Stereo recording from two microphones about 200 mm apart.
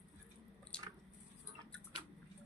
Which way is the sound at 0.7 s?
5° left (ahead or behind).